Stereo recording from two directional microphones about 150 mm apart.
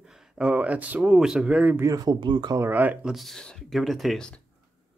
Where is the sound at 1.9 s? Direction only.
25° right (ahead or behind).